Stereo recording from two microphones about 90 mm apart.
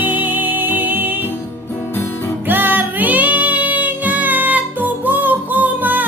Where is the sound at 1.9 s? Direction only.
30° left (ahead or behind).